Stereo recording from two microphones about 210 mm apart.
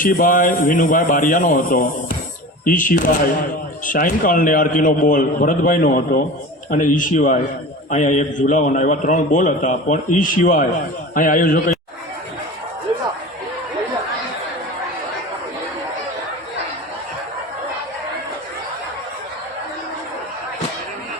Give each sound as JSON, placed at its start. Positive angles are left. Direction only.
{"t": 0.0, "sound": "a man's voice", "side_deg": 40}